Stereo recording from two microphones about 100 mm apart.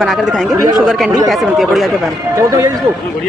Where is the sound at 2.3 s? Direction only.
30° right (ahead or behind).